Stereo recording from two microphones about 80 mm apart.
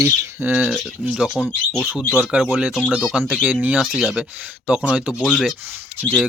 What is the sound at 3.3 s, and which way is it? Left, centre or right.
Speech, centre.